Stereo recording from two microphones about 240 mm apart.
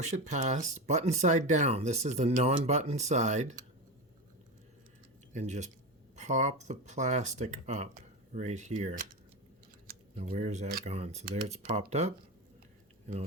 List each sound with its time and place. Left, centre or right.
0.0 s speech: right
5.3 s speech: right
10.2 s speech: right